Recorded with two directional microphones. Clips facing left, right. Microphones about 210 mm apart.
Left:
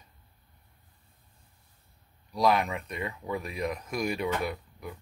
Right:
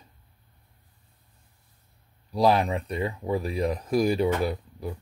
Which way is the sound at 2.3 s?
30° right (ahead or behind).